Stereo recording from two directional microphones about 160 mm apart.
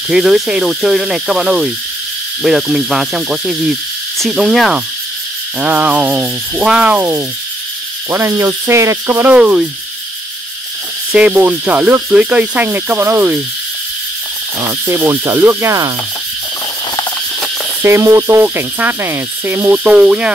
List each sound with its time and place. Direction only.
0.1 s speech: 5° right (ahead or behind)
5.6 s cricket: 10° right (ahead or behind)
11.1 s cricket: 5° right (ahead or behind)
14.7 s cricket: 15° right (ahead or behind)
17.8 s cricket: 15° right (ahead or behind)